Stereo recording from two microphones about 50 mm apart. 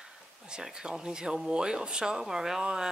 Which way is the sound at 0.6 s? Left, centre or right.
Centre.